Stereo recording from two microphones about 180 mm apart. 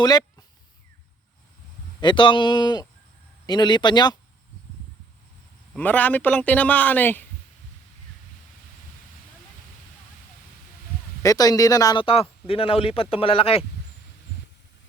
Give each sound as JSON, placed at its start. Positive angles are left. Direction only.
{"t": 0.0, "sound": "speech", "side_deg": 20}
{"t": 2.0, "sound": "speech", "side_deg": 25}
{"t": 5.7, "sound": "a man's voice", "side_deg": 10}
{"t": 11.2, "sound": "speech", "side_deg": 20}